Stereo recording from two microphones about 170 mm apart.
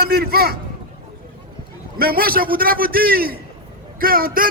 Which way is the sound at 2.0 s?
60° right (ahead or behind).